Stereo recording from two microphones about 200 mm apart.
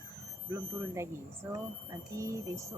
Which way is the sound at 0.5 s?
15° right (ahead or behind).